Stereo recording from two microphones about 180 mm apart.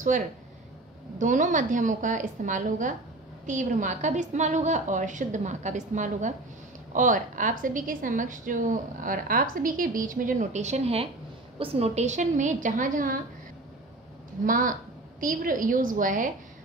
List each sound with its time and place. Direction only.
1.1 s a woman's voice: 45° right (ahead or behind)
14.4 s a woman's voice: 50° right (ahead or behind)